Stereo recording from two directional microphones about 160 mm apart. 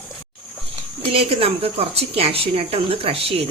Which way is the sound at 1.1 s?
35° right (ahead or behind).